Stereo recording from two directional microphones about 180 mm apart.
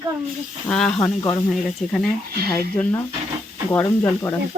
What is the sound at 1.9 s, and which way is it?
Speech, centre (ahead or behind).